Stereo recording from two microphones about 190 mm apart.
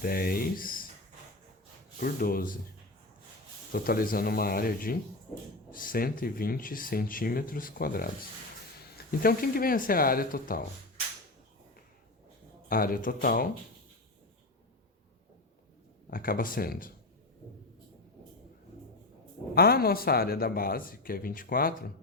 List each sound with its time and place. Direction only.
0.0 s speech: 50° left (ahead or behind)
2.0 s speech: 50° left (ahead or behind)
3.7 s speech: 50° left (ahead or behind)
9.2 s speech: 50° left (ahead or behind)
12.6 s speech: 50° left (ahead or behind)
16.0 s speech: 50° left (ahead or behind)
19.5 s speech: 55° left (ahead or behind)